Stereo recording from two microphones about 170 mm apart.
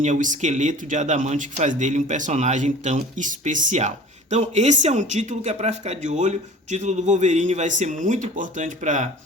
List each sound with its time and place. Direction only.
0.0 s speech: 50° right (ahead or behind)